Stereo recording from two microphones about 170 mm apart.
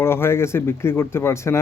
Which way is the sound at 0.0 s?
15° left (ahead or behind).